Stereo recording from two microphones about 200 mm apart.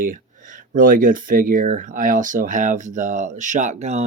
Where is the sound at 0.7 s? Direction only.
45° right (ahead or behind).